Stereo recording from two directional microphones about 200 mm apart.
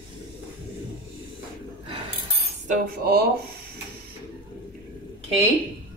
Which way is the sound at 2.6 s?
40° right (ahead or behind).